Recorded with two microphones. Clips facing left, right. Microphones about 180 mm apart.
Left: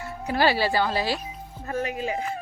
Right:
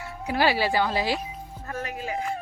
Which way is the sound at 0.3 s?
10° right (ahead or behind).